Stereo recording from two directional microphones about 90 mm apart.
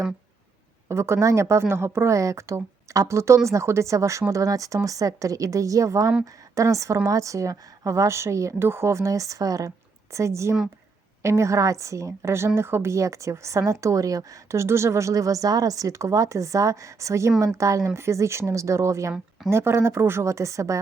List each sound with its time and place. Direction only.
0.9 s a woman's voice: 30° right (ahead or behind)